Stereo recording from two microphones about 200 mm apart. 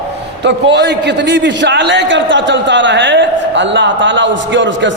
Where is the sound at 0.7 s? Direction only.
60° right (ahead or behind).